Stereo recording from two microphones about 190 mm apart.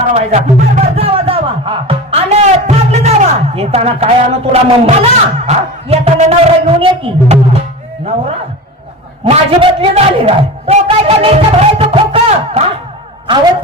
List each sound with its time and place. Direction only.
0.1 s music: 35° right (ahead or behind)
3.5 s a man's voice: 30° right (ahead or behind)
9.2 s a man's voice: 25° right (ahead or behind)